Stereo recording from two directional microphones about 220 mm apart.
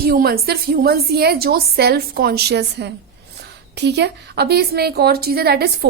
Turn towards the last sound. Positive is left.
turn(degrees=-45)  # may be behind; listen again after turning